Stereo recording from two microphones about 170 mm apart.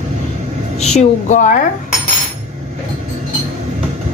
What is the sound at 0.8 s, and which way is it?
Speech, 40° left (ahead or behind).